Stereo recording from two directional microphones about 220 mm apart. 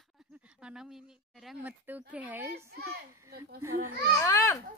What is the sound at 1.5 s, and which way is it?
Speech, 5° right (ahead or behind).